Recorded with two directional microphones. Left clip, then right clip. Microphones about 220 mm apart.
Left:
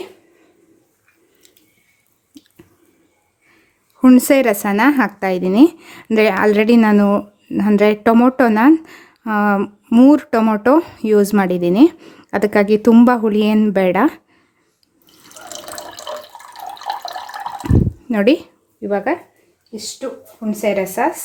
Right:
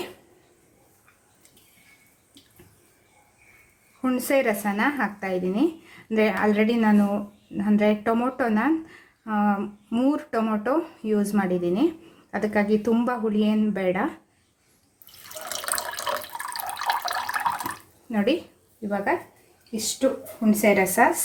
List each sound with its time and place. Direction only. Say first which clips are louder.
4.0 s speech: left 11 dB; 50° left (ahead or behind)
15.4 s water: right 1 dB; centre (ahead or behind)
18.1 s a woman's voice: left 10 dB; 45° left (ahead or behind)
20.5 s speech: left 2 dB; 30° left (ahead or behind)